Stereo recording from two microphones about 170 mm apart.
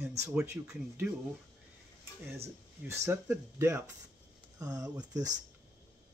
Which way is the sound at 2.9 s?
15° right (ahead or behind).